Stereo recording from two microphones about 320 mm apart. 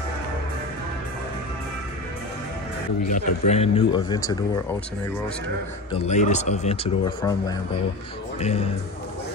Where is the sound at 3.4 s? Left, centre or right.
Centre.